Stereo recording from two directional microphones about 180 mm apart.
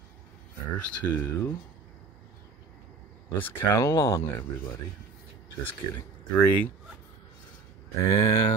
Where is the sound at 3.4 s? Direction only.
15° left (ahead or behind).